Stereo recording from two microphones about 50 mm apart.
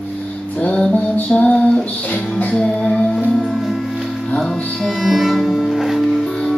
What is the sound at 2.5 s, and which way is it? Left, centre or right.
Music, centre.